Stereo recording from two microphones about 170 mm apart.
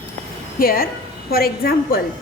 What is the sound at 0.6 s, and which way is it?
Speech, 60° left (ahead or behind).